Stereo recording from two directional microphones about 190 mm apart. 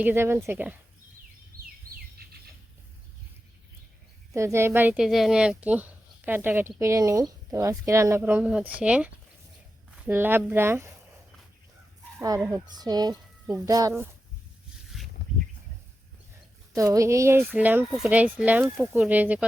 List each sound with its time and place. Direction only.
0.0 s speech: 10° right (ahead or behind)
1.5 s bird vocalization: 50° right (ahead or behind)
4.4 s speech: 15° right (ahead or behind)
12.5 s speech: 20° right (ahead or behind)
16.7 s speech: 15° right (ahead or behind)